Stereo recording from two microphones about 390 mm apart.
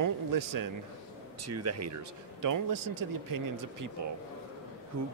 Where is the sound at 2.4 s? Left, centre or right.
Right.